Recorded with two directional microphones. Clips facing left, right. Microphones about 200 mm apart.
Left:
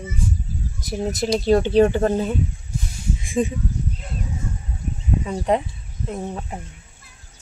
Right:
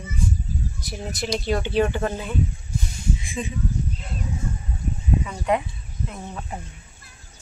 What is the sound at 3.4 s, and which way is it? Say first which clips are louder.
Speech: left 12 dB; 45° left (ahead or behind).